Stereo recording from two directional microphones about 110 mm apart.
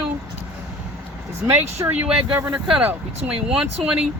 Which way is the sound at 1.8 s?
15° right (ahead or behind).